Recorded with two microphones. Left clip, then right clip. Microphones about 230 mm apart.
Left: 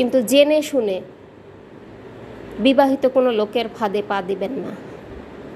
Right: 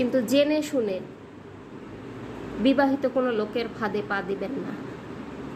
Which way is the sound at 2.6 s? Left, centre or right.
Left.